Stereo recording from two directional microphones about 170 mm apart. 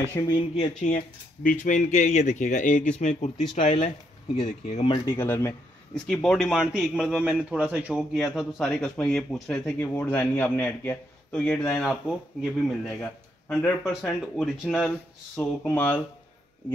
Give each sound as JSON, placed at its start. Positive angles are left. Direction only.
{"t": 0.3, "sound": "speech", "side_deg": 40}
{"t": 5.0, "sound": "a man's voice", "side_deg": 15}
{"t": 15.3, "sound": "speech", "side_deg": 10}